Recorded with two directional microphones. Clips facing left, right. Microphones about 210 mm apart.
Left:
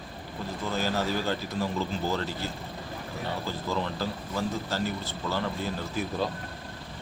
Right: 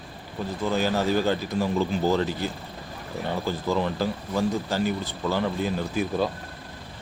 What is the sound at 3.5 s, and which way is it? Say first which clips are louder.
Speech: right 7 dB; 15° right (ahead or behind).